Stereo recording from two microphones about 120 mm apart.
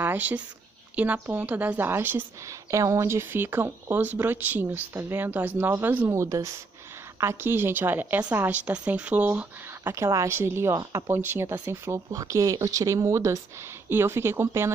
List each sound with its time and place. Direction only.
0.0 s a sound: 15° right (ahead or behind)
0.9 s a woman's voice: 15° right (ahead or behind)
9.9 s speech: 25° right (ahead or behind)